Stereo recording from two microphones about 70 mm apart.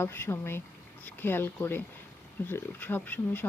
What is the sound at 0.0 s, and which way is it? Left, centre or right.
A woman's voice, left.